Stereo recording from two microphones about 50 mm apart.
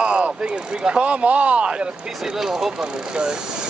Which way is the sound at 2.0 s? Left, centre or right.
Centre.